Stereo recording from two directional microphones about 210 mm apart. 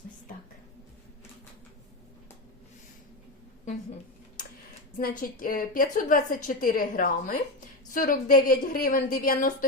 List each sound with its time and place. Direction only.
4.9 s a woman's voice: 45° left (ahead or behind)